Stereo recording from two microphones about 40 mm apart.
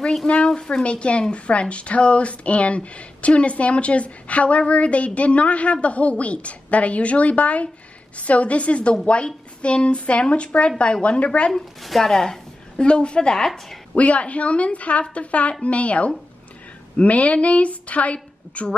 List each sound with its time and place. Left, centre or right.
0.5 s a woman's voice: centre
0.8 s speech: left
11.8 s a woman's voice: centre
12.8 s speech: left
13.9 s speech: left